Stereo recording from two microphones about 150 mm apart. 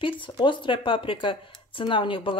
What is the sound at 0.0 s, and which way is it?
Speech, 35° left (ahead or behind).